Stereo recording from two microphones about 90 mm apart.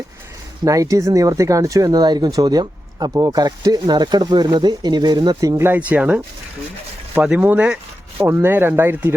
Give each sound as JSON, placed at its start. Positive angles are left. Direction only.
{"t": 0.6, "sound": "speech", "side_deg": -40}
{"t": 5.5, "sound": "speech", "side_deg": -20}